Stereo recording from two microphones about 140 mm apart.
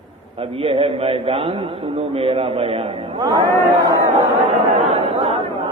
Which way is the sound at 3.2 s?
30° right (ahead or behind).